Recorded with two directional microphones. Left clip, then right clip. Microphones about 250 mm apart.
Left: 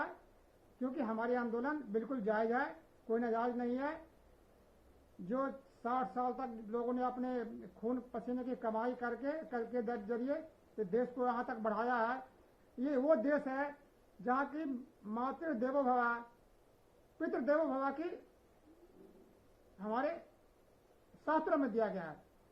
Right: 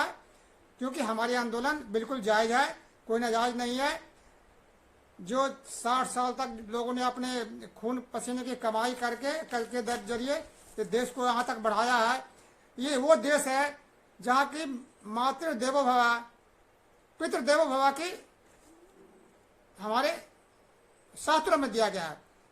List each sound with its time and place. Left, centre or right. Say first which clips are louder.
0.8 s speech: right 8 dB; right
5.3 s speech: right 9 dB; right
15.1 s speech: right 9 dB; right
19.8 s speech: right 9 dB; right
21.2 s speech: right 8 dB; right